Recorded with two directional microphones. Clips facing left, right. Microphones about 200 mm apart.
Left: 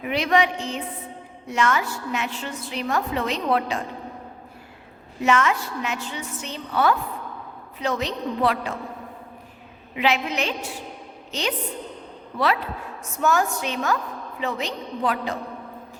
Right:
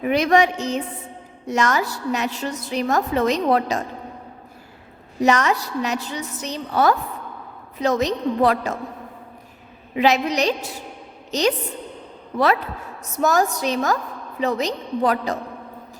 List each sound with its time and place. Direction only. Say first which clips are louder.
0.0 s a woman's voice: right 4 dB; 45° right (ahead or behind)
5.2 s a woman's voice: right 2 dB; 40° right (ahead or behind)
9.9 s a woman's voice: right 5 dB; 40° right (ahead or behind)
13.1 s a woman's voice: right 3 dB; 40° right (ahead or behind)